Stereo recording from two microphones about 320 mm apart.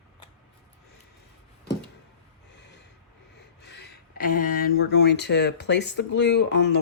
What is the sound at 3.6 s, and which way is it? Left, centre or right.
Speech, left.